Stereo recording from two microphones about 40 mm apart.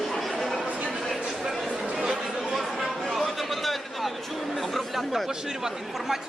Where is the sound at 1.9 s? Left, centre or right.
Centre.